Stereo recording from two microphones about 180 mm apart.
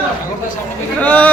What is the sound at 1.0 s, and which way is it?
Speech, 10° left (ahead or behind).